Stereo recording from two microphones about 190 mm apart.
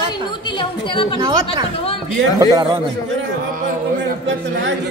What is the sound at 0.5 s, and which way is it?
Speech, 25° left (ahead or behind).